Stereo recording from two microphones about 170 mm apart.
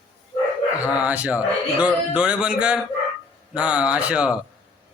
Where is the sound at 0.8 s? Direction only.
10° right (ahead or behind).